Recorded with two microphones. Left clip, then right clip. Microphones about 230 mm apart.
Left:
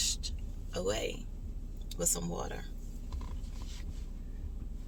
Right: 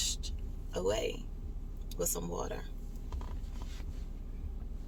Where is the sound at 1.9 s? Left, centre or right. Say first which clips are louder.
Left 1 dB; centre.